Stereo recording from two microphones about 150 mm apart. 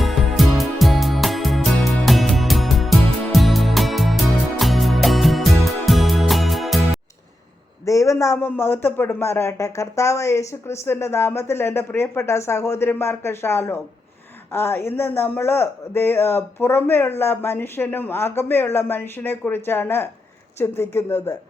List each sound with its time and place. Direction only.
0.0 s music: centre (ahead or behind)
7.9 s a man's voice: 20° left (ahead or behind)